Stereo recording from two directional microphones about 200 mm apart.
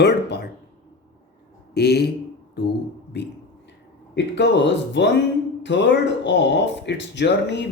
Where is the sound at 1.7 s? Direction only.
55° left (ahead or behind).